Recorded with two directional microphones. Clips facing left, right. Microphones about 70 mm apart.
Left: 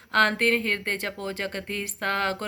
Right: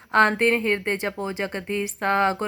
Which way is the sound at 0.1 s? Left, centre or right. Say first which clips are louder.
Right 3 dB; centre.